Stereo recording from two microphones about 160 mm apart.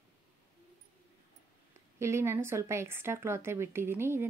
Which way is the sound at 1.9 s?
15° right (ahead or behind).